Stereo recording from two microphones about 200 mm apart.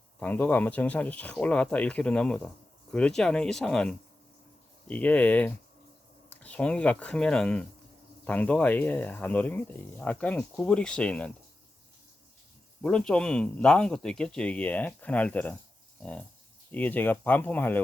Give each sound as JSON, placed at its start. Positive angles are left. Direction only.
{"t": 0.2, "sound": "speech", "side_deg": 10}
{"t": 12.8, "sound": "speech", "side_deg": 5}
{"t": 16.7, "sound": "speech", "side_deg": 10}